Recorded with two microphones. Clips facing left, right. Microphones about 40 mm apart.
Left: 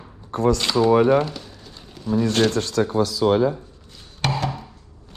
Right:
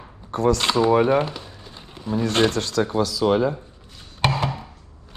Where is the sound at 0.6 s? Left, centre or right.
Right.